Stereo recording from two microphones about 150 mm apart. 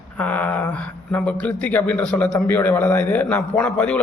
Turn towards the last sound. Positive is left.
turn(degrees=10)  # may be behind; listen again after turning